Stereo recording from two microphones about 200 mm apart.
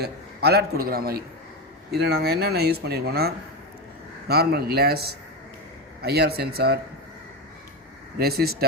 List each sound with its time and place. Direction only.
0.0 s speech: 55° right (ahead or behind)
8.2 s speech: 50° right (ahead or behind)